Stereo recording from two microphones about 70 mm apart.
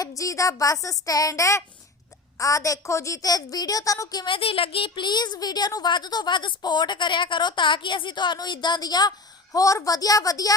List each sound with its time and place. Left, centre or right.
0.0 s a woman's voice: left
4.1 s speech: left
4.9 s a woman's voice: left